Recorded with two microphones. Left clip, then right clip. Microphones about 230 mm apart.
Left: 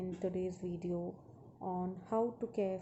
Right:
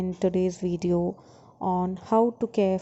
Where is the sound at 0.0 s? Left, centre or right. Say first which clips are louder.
Right 13 dB; right.